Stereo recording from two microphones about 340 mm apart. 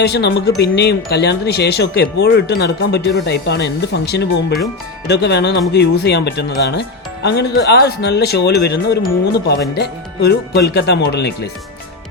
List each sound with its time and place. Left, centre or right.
0.0 s speech: left